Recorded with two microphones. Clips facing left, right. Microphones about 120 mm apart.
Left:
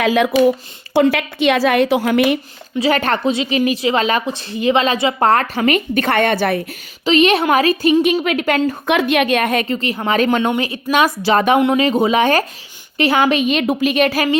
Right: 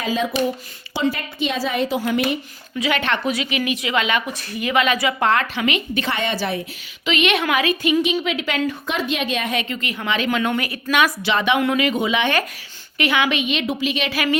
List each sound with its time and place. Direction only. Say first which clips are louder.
0.0 s a woman's voice: left 8 dB; 70° left (ahead or behind)
2.7 s a woman's voice: left 5 dB; 35° left (ahead or behind)
3.2 s a woman's voice: left 6 dB; 25° left (ahead or behind); by 6.6 s 55° left (ahead or behind)
7.0 s a woman's voice: left 7 dB; 35° left (ahead or behind)
8.0 s a woman's voice: left 6 dB; 50° left (ahead or behind)
8.9 s a woman's voice: left 8 dB; 65° left (ahead or behind); by 9.7 s 50° left (ahead or behind)
9.7 s a woman's voice: left 7 dB; 30° left (ahead or behind)
11.6 s a woman's voice: left 5 dB; 30° left (ahead or behind); by 14.3 s 45° left (ahead or behind)